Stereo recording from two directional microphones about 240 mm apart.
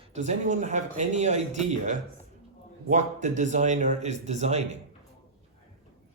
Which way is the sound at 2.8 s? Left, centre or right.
Right.